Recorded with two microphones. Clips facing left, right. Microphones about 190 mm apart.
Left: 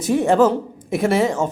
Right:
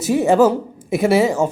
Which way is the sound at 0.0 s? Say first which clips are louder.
Right 2 dB; 5° right (ahead or behind).